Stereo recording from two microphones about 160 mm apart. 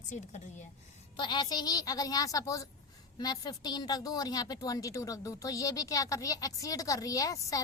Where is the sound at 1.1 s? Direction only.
30° left (ahead or behind).